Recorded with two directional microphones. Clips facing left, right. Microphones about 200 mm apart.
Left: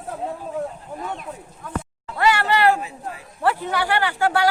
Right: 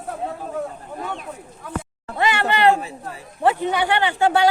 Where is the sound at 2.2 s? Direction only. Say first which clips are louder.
Left 1 dB; 20° right (ahead or behind).